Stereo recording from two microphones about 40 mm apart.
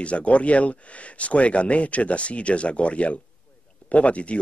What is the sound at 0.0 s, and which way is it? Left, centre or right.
Speech, left.